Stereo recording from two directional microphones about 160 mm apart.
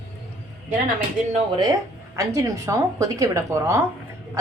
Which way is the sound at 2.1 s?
20° right (ahead or behind).